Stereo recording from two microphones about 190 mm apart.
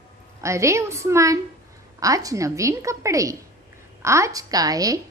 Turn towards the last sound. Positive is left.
turn(degrees=-20)  # may be behind; listen again after turning